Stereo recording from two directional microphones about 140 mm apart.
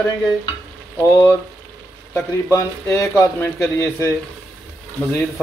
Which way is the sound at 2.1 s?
20° left (ahead or behind).